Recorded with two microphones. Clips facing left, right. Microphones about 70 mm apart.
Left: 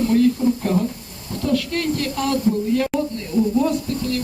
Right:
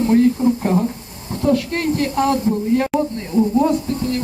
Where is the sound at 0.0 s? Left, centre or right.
Right.